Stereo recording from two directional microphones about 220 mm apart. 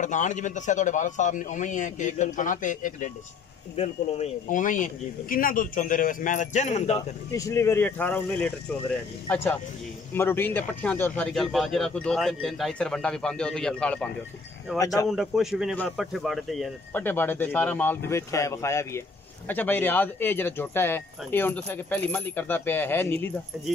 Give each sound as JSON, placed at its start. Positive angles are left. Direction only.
{"t": 0.0, "sound": "speech", "side_deg": 35}
{"t": 7.3, "sound": "a man's voice", "side_deg": 15}